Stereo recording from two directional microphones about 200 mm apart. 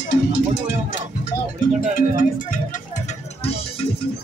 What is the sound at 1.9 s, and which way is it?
Music, 45° left (ahead or behind).